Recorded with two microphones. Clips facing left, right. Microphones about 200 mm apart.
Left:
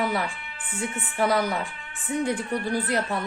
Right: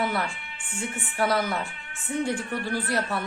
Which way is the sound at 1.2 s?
15° left (ahead or behind).